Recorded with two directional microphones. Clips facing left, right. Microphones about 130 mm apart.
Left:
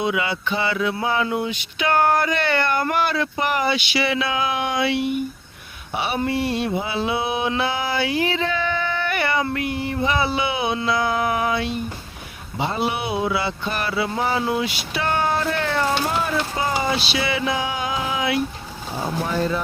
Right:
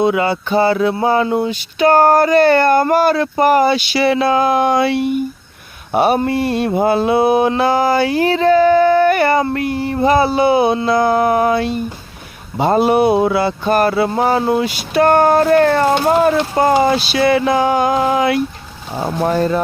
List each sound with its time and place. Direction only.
0.0 s mantra: 40° right (ahead or behind)
12.5 s speech: 45° right (ahead or behind)